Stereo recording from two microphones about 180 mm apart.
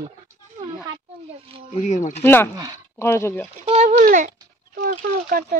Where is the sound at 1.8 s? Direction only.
40° left (ahead or behind).